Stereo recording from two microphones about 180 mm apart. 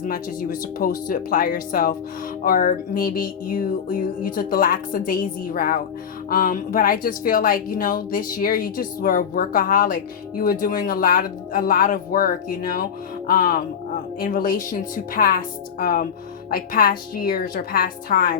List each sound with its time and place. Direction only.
0.0 s speech: 50° left (ahead or behind)